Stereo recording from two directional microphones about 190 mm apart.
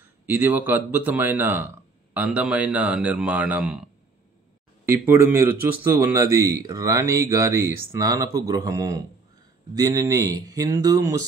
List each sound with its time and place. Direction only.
0.3 s speech: 10° right (ahead or behind)
4.8 s speech: 10° right (ahead or behind)